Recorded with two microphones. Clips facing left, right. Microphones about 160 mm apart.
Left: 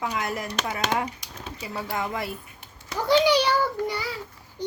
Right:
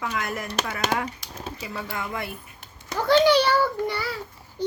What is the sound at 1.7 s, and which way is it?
Speech, 35° left (ahead or behind).